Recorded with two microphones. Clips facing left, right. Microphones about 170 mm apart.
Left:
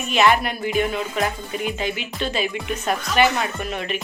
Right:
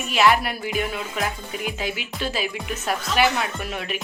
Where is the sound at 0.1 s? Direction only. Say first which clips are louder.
Left 1 dB; 5° right (ahead or behind).